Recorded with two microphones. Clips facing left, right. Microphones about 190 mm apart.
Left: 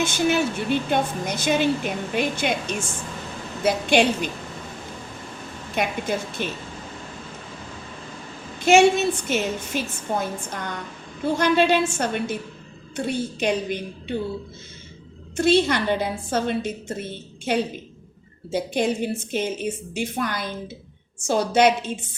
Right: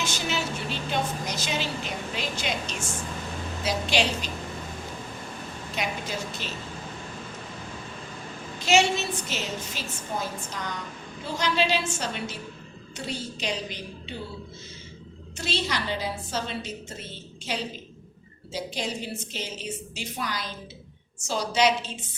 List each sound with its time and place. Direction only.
0.0 s a woman's voice: 55° left (ahead or behind)
5.7 s a woman's voice: 55° left (ahead or behind)
8.5 s a woman's voice: 55° left (ahead or behind)
15.4 s a woman's voice: 55° left (ahead or behind)